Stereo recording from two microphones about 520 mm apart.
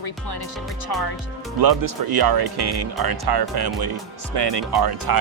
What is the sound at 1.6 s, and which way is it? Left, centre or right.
Speech, right.